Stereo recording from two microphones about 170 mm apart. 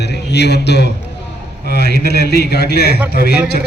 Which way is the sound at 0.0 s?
80° left.